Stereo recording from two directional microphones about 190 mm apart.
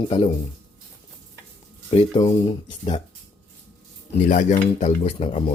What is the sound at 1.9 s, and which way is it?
Speech, 25° left (ahead or behind).